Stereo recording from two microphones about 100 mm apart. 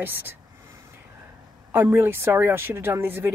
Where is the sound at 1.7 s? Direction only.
20° right (ahead or behind).